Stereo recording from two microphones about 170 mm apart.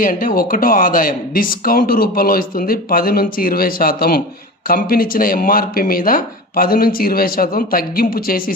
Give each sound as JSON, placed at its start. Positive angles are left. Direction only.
{"t": 0.0, "sound": "speech", "side_deg": 55}